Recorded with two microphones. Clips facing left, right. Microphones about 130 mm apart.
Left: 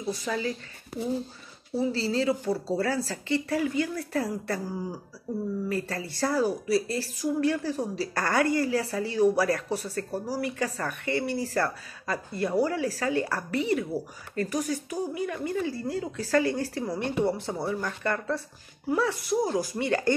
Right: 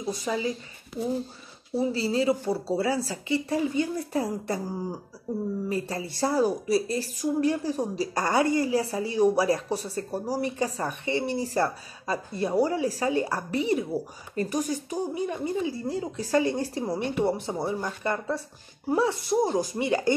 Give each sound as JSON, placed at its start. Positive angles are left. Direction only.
{"t": 0.0, "sound": "a woman's voice", "side_deg": -20}
{"t": 1.8, "sound": "a woman's voice", "side_deg": -15}
{"t": 19.5, "sound": "a woman's voice", "side_deg": -20}